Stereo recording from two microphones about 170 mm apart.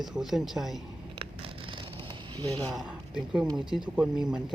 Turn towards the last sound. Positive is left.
turn(degrees=-5)  # may be behind; listen again after turning